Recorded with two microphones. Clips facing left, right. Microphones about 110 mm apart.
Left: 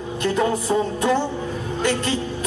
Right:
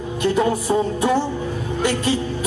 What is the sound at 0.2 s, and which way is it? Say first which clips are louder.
Music: right 2 dB; 10° right (ahead or behind).